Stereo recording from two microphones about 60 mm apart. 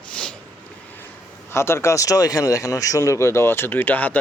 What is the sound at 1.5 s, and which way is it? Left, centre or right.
Speech, left.